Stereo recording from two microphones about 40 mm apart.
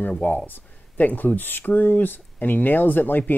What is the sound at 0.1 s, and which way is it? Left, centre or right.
Speech, left.